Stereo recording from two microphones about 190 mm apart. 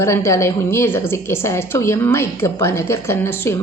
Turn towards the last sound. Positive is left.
turn(degrees=10)  # may be behind; listen again after turning